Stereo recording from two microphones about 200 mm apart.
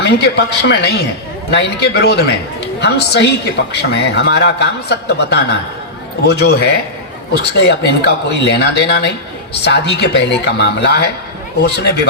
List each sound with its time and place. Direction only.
0.0 s a man's voice: 55° left (ahead or behind)